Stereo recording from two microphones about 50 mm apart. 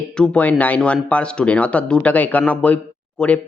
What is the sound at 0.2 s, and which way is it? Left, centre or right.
A man's voice, centre.